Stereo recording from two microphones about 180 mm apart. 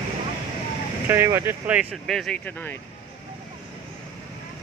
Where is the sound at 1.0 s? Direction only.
10° right (ahead or behind); by 2.8 s 10° left (ahead or behind).